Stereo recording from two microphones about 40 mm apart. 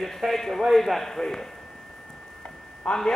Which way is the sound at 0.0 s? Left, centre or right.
Centre.